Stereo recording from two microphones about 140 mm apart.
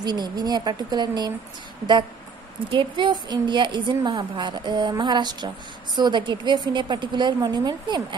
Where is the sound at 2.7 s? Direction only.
35° right (ahead or behind).